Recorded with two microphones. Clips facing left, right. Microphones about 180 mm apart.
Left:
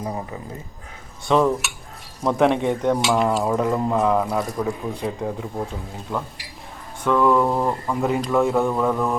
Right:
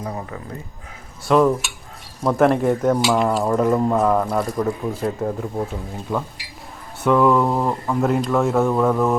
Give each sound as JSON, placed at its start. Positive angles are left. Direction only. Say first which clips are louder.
{"t": 1.3, "sound": "speech", "louder": "right 2 dB", "side_deg": 0}